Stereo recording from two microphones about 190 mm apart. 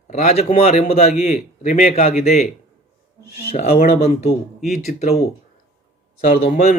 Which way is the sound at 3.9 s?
35° left (ahead or behind).